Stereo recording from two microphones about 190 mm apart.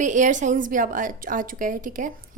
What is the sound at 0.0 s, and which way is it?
A woman's voice, 40° right (ahead or behind).